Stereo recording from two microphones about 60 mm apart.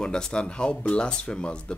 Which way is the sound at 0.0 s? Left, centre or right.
Centre.